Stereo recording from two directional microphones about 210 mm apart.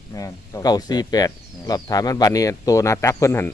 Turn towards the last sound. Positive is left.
turn(degrees=15)  # may be behind; listen again after turning